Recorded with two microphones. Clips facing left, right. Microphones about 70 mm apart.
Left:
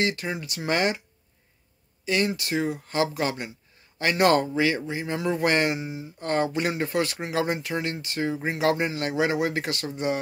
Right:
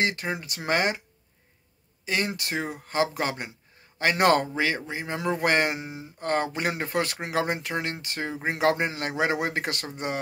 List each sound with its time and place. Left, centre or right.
0.0 s speech: right
2.0 s speech: right